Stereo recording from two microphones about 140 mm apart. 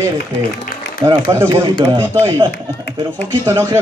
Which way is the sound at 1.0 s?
20° right (ahead or behind).